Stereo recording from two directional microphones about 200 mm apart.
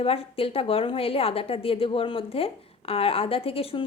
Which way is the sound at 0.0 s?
30° left (ahead or behind).